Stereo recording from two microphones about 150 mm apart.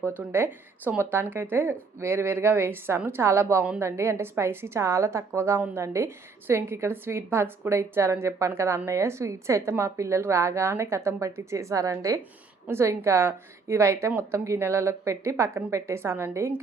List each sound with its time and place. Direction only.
0.0 s a woman's voice: 15° right (ahead or behind)